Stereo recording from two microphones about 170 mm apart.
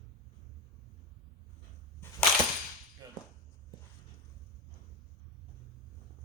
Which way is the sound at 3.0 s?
20° right (ahead or behind).